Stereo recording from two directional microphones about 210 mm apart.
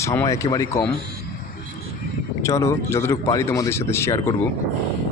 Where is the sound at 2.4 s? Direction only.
15° left (ahead or behind).